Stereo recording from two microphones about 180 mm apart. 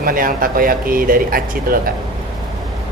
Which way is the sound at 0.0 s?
50° right (ahead or behind).